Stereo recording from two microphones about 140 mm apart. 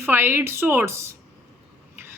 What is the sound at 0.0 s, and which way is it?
A woman's voice, 15° right (ahead or behind).